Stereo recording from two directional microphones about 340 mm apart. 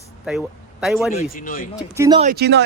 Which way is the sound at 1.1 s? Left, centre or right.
Left.